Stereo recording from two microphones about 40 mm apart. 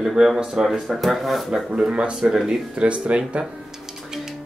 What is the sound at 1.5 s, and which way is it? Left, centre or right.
Speech, right.